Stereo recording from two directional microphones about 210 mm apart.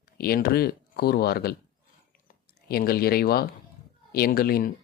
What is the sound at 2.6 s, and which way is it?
A man's voice, 45° left (ahead or behind).